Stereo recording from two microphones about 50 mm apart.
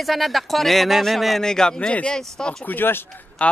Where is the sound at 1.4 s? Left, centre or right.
Centre.